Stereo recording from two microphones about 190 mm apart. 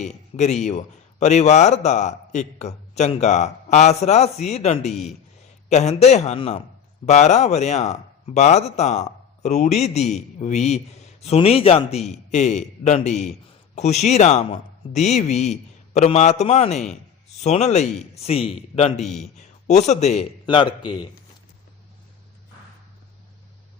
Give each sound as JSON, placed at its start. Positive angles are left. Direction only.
{"t": 0.0, "sound": "speech", "side_deg": 35}